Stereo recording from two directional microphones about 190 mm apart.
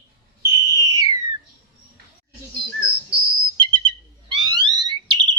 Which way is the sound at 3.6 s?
25° right (ahead or behind).